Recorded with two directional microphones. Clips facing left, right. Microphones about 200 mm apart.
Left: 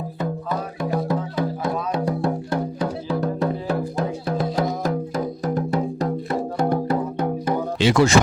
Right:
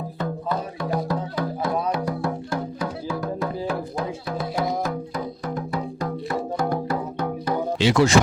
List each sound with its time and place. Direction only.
0.9 s music: 20° left (ahead or behind)
7.8 s speech: 50° left (ahead or behind)